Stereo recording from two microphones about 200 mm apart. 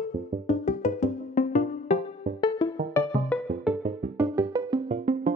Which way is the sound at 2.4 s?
20° left (ahead or behind).